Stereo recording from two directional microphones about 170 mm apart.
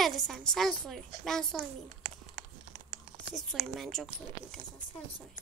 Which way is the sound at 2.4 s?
55° right (ahead or behind).